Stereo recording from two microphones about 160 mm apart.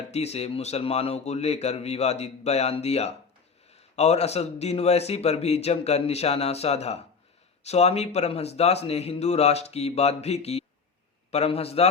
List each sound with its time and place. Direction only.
0.1 s speech: 40° left (ahead or behind)